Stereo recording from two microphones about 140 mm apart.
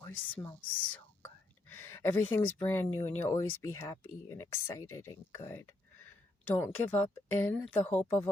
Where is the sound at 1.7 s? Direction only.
15° left (ahead or behind).